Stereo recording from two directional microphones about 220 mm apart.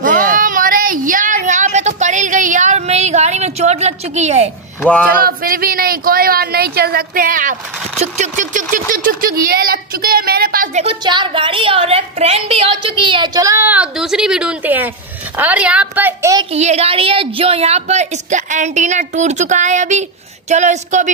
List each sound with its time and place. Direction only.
0.0 s a sound: 35° right (ahead or behind)
5.2 s a woman's voice: 40° right (ahead or behind); by 16.4 s 15° right (ahead or behind)
16.5 s a woman's voice: 30° right (ahead or behind)